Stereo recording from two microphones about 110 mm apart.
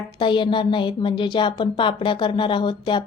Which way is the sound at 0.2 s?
45° left (ahead or behind).